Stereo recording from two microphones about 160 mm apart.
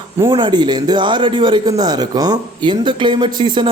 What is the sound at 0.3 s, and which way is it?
A man's voice, 30° right (ahead or behind).